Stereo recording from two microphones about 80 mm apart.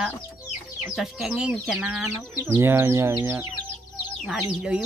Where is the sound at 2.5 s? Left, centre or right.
Right.